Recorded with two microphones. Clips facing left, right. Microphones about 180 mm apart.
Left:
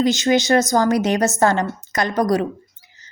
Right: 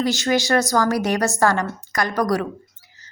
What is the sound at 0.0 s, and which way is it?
A woman's voice, 20° left (ahead or behind).